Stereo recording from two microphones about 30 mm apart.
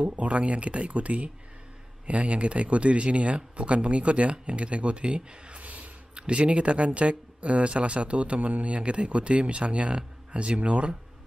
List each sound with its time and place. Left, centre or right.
0.0 s speech: right
5.6 s a sound: right
6.1 s speech: right
8.4 s speech: right